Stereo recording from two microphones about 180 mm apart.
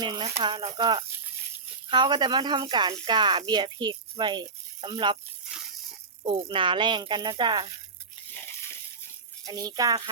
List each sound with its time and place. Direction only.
0.0 s speech: 25° right (ahead or behind)
6.2 s speech: 30° right (ahead or behind)
9.4 s speech: 20° right (ahead or behind)